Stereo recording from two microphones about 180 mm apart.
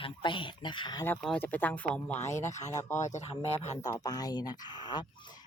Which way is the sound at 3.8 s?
20° left (ahead or behind).